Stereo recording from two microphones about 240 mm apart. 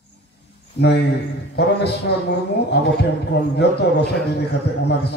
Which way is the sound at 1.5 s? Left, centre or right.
Left.